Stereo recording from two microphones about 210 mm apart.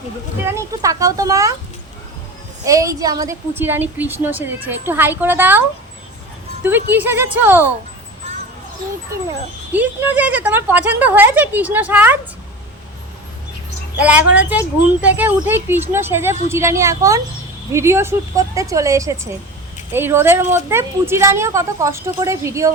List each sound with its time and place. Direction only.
0.4 s a woman's voice: 15° right (ahead or behind)
2.6 s a woman's voice: 15° right (ahead or behind)
6.7 s a woman's voice: 10° right (ahead or behind)
9.7 s a woman's voice: 5° right (ahead or behind)
14.0 s a woman's voice: 5° right (ahead or behind)